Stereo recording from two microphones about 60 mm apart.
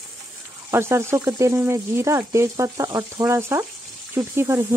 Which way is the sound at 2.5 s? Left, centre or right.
Right.